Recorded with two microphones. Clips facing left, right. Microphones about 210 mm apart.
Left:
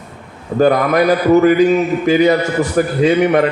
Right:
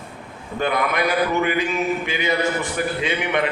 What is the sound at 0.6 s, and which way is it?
A man's voice, 40° left (ahead or behind).